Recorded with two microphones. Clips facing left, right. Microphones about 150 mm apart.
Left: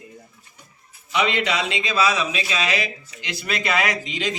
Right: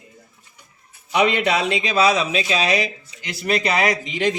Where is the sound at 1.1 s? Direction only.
55° right (ahead or behind).